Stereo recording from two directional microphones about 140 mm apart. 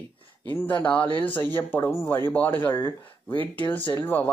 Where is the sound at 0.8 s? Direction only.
10° left (ahead or behind).